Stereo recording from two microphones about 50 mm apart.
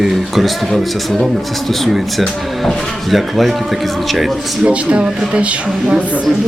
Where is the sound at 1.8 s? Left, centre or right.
Centre.